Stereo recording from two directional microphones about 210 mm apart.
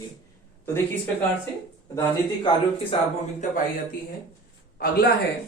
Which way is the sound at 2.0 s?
25° left (ahead or behind).